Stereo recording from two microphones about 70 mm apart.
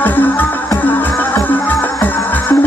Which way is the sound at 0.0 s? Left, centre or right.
Left.